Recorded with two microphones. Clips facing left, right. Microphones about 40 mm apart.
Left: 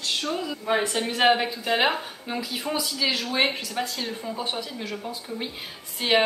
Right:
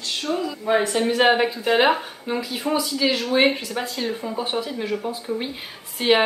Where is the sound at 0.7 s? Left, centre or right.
Centre.